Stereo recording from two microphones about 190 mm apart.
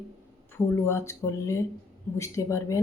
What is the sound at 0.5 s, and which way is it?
Speech, 15° left (ahead or behind).